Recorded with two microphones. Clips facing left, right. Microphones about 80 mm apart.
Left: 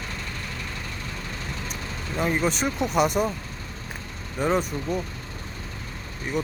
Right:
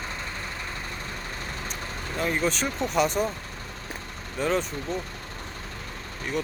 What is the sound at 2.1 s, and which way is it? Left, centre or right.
Speech, centre.